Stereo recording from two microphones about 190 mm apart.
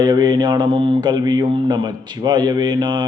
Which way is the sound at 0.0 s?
20° right (ahead or behind).